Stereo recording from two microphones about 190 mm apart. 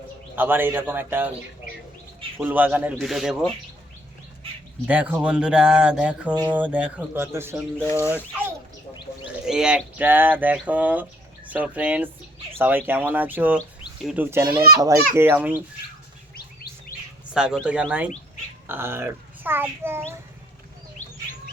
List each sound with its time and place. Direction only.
0.3 s speech: 10° right (ahead or behind)
2.4 s speech: 10° right (ahead or behind)
4.9 s speech: 5° right (ahead or behind)
17.3 s speech: 5° right (ahead or behind)
21.0 s bird: 40° left (ahead or behind)